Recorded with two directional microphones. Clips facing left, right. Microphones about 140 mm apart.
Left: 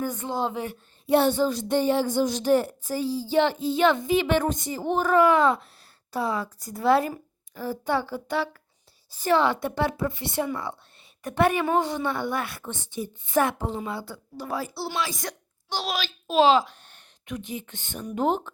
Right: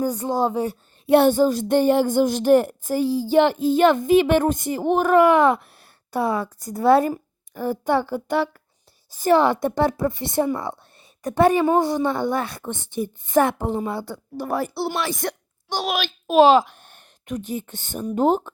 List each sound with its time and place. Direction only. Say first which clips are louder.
0.0 s speech: right 6 dB; 35° right (ahead or behind)
1.0 s a woman's voice: right 5 dB; 60° right (ahead or behind); by 18.5 s 40° right (ahead or behind)